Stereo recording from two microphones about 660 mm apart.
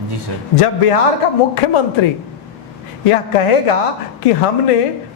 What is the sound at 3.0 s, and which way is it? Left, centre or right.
Speech, left.